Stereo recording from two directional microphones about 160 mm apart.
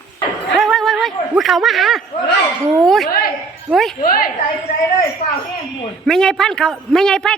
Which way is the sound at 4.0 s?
65° left (ahead or behind).